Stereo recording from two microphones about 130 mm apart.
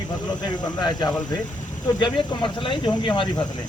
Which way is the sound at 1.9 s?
35° left (ahead or behind).